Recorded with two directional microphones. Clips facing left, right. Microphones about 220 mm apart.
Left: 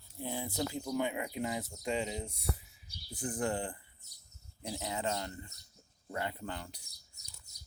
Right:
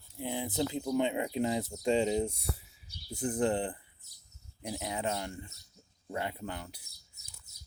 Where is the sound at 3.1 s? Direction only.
20° right (ahead or behind).